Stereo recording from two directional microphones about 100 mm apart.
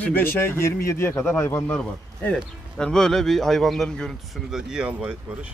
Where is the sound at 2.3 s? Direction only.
5° left (ahead or behind).